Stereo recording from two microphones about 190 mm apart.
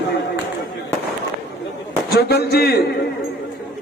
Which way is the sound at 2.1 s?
55° left (ahead or behind).